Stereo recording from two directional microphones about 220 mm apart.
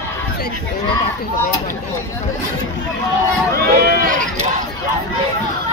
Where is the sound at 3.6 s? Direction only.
45° right (ahead or behind).